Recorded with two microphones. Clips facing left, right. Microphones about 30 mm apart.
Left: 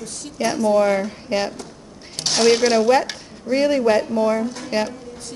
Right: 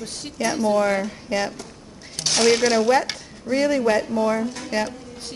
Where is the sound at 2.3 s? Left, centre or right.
Centre.